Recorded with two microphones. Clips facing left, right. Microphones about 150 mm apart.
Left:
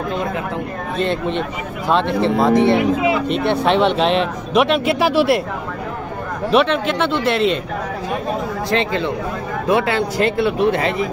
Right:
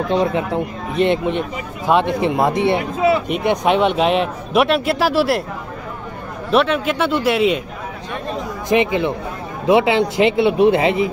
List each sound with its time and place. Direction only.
0.1 s speech: 35° right (ahead or behind)
0.9 s a man's voice: 20° right (ahead or behind); by 5.4 s centre (ahead or behind)
6.5 s a man's voice: 5° right (ahead or behind)
8.6 s a man's voice: 15° right (ahead or behind)